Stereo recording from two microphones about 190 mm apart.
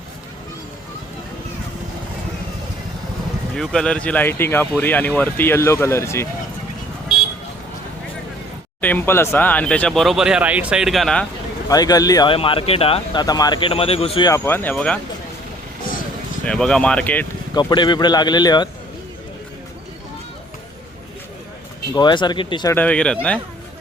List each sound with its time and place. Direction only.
3.5 s speech: 5° left (ahead or behind)
8.8 s speech: 10° left (ahead or behind)
11.7 s speech: 20° left (ahead or behind)
14.3 s speech: 15° left (ahead or behind)
16.4 s speech: 5° left (ahead or behind)
17.5 s speech: 20° left (ahead or behind)
21.9 s speech: 25° left (ahead or behind)
22.7 s speech: 5° left (ahead or behind)